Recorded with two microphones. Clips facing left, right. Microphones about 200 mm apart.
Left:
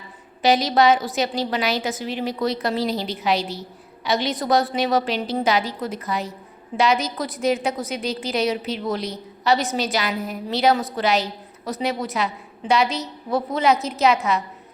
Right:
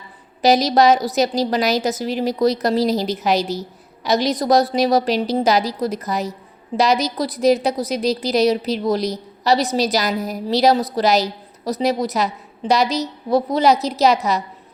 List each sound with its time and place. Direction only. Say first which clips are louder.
0.4 s a woman's voice: right 3 dB; 40° right (ahead or behind)